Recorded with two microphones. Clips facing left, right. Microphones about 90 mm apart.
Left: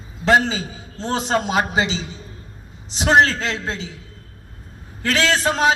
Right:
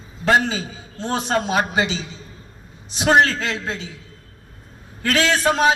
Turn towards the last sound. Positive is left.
turn(degrees=25)  # may be behind; listen again after turning